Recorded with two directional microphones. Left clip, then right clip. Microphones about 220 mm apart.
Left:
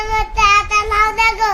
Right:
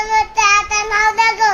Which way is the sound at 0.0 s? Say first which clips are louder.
Right 1 dB; centre (ahead or behind).